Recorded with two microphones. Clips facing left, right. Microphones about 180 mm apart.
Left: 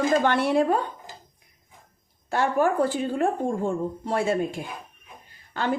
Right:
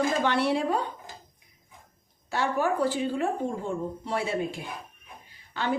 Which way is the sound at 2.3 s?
50° left (ahead or behind).